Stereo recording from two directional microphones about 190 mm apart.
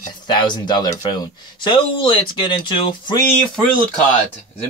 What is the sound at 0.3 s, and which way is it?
Speech, 25° left (ahead or behind).